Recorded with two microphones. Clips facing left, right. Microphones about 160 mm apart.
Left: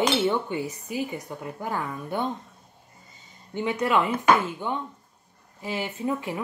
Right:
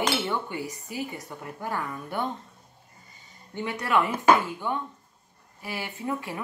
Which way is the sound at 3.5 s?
20° left (ahead or behind).